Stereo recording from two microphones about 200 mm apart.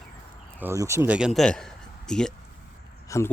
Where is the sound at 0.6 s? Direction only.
15° right (ahead or behind).